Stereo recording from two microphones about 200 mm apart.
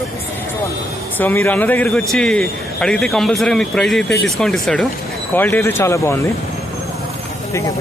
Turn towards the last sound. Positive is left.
turn(degrees=15)  # may be behind; listen again after turning